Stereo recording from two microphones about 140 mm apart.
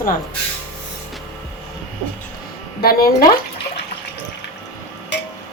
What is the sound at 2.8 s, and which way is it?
Speech, 90° left.